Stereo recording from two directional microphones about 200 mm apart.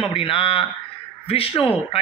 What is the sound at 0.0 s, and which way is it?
Speech, 25° left (ahead or behind).